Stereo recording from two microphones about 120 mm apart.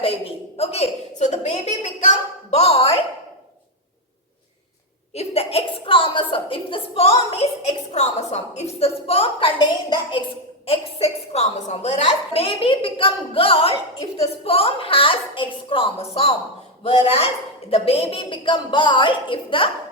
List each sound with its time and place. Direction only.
0.0 s a sound: 50° left (ahead or behind)
5.1 s a woman's voice: 55° left (ahead or behind)
9.9 s a woman's voice: 45° left (ahead or behind)
10.7 s a woman's voice: 60° left (ahead or behind)